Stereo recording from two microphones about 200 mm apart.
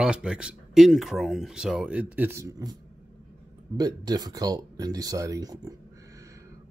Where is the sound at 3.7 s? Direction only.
20° right (ahead or behind).